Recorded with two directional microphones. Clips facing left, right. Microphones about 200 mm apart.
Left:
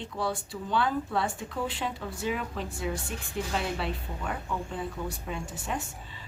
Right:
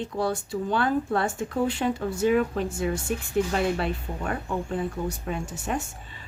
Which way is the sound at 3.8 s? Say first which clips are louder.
Right 5 dB; 50° right (ahead or behind).